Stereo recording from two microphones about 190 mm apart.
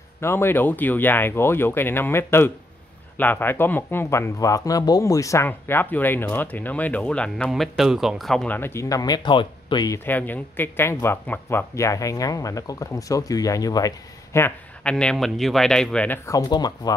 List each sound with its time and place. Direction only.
0.2 s speech: 15° left (ahead or behind)
16.3 s speech: 20° left (ahead or behind)